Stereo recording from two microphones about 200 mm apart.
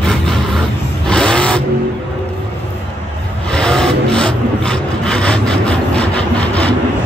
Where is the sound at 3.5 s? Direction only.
5° left (ahead or behind).